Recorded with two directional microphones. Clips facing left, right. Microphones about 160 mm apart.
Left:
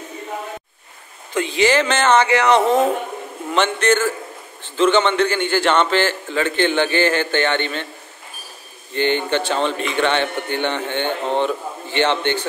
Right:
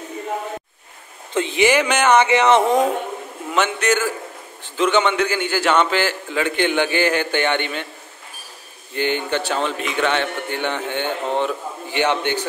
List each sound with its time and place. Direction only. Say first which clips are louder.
1.3 s a man's voice: even; 20° right (ahead or behind)
8.9 s a man's voice: left 2 dB; 5° right (ahead or behind)